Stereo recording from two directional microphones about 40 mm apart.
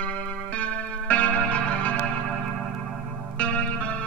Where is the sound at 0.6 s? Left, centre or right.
Left.